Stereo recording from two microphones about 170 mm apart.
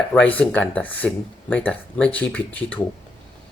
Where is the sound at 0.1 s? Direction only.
10° left (ahead or behind).